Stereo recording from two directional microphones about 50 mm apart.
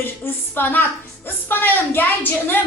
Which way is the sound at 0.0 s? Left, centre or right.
Left.